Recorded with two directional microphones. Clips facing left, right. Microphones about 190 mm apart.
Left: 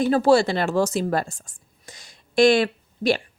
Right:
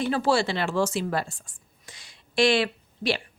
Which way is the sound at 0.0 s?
40° left (ahead or behind).